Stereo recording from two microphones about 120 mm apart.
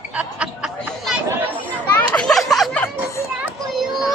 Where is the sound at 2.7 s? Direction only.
20° left (ahead or behind).